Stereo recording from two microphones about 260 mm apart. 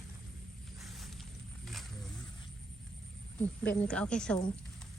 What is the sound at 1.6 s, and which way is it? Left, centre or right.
Wild animals, centre.